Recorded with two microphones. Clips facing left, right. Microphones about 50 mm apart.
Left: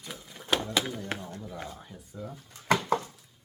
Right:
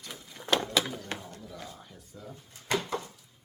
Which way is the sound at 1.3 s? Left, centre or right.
Left.